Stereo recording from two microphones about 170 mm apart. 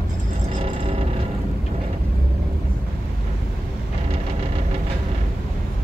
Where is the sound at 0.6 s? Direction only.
35° right (ahead or behind).